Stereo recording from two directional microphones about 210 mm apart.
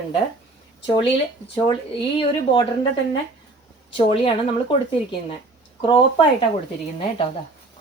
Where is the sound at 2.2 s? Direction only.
25° left (ahead or behind).